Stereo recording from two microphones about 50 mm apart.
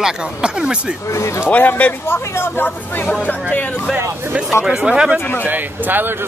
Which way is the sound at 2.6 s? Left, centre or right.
Left.